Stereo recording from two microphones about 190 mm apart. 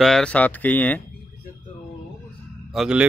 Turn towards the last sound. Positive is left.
turn(degrees=-5)  # may be behind; listen again after turning